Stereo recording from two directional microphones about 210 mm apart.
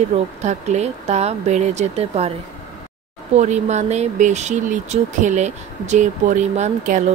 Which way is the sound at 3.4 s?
35° right (ahead or behind).